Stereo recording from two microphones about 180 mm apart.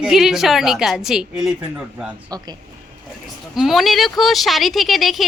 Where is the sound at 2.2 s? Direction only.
20° right (ahead or behind).